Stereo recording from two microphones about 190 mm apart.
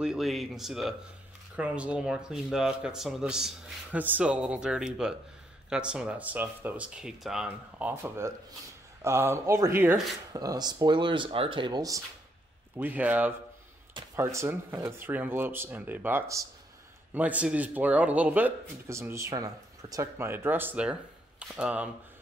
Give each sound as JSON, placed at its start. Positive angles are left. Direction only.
{"t": 0.0, "sound": "speech", "side_deg": 0}
{"t": 12.7, "sound": "speech", "side_deg": -10}